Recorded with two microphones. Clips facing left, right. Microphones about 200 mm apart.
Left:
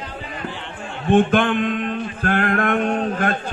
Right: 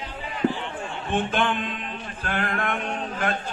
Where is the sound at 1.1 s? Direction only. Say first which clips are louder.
Left 9 dB; 55° left (ahead or behind).